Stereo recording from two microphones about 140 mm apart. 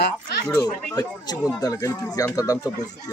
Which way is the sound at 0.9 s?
25° left (ahead or behind).